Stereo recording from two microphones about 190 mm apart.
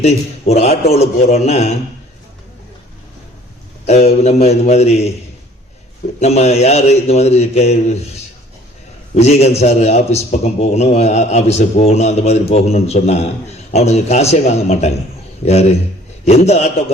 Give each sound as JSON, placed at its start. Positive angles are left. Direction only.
{"t": 0.0, "sound": "a man's voice", "side_deg": 35}
{"t": 3.8, "sound": "a man's voice", "side_deg": 35}
{"t": 6.1, "sound": "a man's voice", "side_deg": 35}
{"t": 9.1, "sound": "a man's voice", "side_deg": 35}
{"t": 16.2, "sound": "a man's voice", "side_deg": 35}